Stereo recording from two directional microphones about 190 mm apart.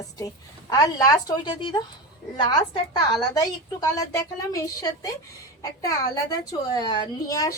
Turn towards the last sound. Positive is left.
turn(degrees=20)  # may be behind; listen again after turning